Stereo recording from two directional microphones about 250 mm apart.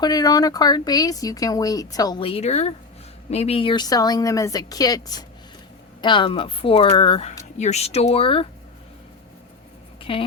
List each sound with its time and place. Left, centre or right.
0.0 s speech: centre
10.0 s speech: left